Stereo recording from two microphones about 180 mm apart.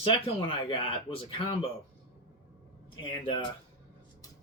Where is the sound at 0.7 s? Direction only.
30° left (ahead or behind).